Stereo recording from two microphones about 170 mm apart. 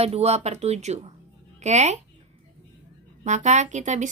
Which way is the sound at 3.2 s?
45° right (ahead or behind).